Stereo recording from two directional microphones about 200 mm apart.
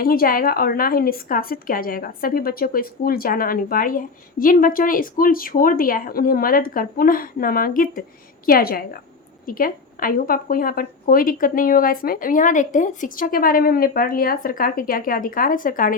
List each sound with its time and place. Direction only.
0.0 s a woman's voice: 45° left (ahead or behind)